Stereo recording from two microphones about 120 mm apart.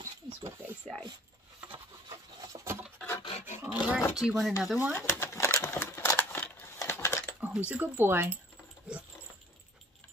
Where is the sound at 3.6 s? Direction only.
10° right (ahead or behind).